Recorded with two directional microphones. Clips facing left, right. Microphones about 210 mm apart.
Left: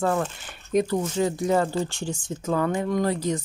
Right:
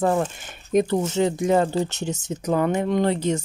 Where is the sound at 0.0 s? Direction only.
25° right (ahead or behind).